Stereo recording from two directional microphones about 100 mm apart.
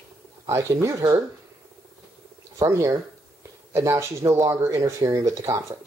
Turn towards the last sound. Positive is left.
turn(degrees=-35)  # may be behind; listen again after turning